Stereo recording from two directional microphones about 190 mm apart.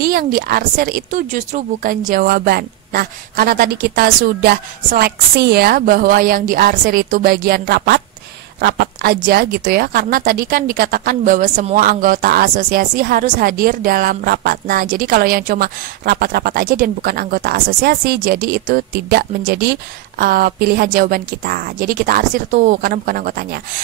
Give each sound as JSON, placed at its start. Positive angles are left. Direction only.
{"t": 0.0, "sound": "speech", "side_deg": -50}